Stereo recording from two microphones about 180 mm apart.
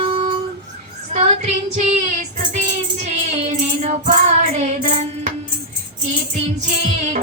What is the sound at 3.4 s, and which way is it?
Music, 40° right (ahead or behind).